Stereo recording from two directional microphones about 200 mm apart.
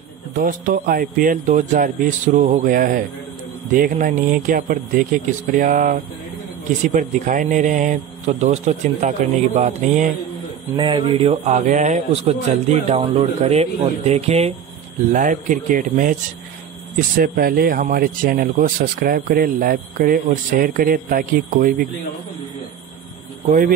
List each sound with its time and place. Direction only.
0.4 s a man's voice: 40° right (ahead or behind)
10.8 s a man's voice: 25° right (ahead or behind); by 16.2 s 40° right (ahead or behind)
17.2 s speech: 45° right (ahead or behind)